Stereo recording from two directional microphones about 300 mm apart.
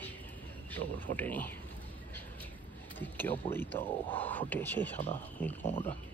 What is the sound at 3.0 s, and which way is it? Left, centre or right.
Speech, centre.